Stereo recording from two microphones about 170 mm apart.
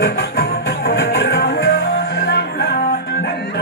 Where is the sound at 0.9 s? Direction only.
90° left.